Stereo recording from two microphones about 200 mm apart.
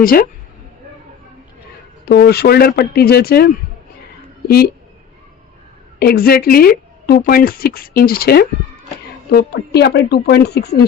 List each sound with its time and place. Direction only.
0.0 s speech: 45° left (ahead or behind)
2.0 s a woman's voice: 50° left (ahead or behind)
6.0 s speech: 50° left (ahead or behind)